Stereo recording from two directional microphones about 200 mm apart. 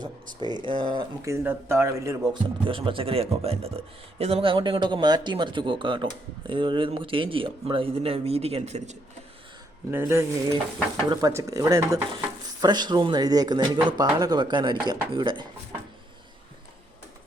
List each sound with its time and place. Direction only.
0.0 s speech: 20° right (ahead or behind)
9.9 s stir: 15° right (ahead or behind)
12.6 s speech: 20° right (ahead or behind)